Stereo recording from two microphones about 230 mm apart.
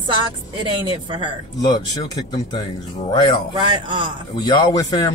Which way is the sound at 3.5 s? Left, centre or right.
Right.